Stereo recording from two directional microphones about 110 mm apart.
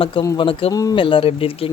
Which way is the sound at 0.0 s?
50° left (ahead or behind).